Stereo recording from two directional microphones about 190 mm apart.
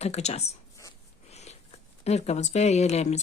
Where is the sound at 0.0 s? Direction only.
35° left (ahead or behind).